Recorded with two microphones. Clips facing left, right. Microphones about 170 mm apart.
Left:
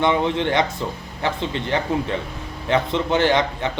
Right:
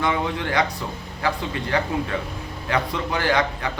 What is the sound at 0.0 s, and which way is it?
A man's voice, 25° left (ahead or behind).